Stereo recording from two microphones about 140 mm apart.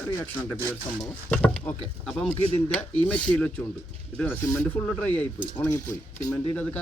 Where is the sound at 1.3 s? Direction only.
10° left (ahead or behind).